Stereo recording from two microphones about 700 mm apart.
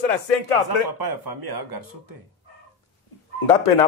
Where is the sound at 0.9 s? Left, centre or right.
Right.